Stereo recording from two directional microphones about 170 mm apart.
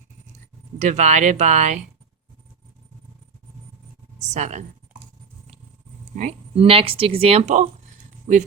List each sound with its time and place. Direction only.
0.8 s speech: 45° right (ahead or behind)
4.2 s a woman's voice: 40° right (ahead or behind)
6.1 s speech: 40° right (ahead or behind)